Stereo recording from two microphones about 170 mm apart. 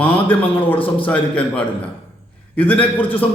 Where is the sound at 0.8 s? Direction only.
30° left (ahead or behind).